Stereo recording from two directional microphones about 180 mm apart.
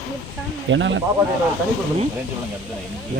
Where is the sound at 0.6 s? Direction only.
90° right.